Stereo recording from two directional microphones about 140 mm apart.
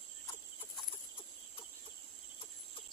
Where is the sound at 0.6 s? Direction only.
40° left (ahead or behind).